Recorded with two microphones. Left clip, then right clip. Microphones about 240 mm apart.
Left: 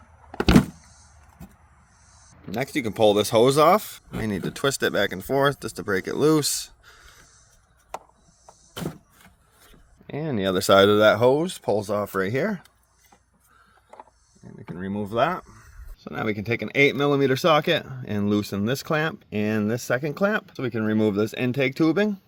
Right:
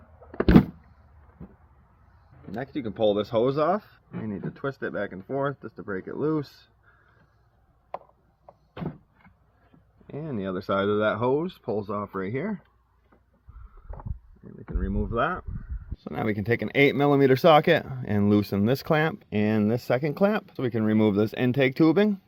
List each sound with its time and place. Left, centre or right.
2.5 s speech: left
4.2 s speech: left
10.1 s speech: left
14.8 s a sound: left
16.0 s speech: centre